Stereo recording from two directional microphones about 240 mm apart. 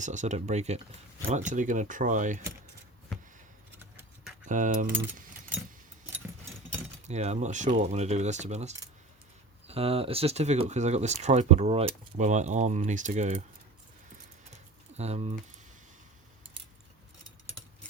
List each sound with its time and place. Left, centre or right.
0.0 s speech: right
4.4 s speech: right
7.1 s speech: right
14.9 s speech: right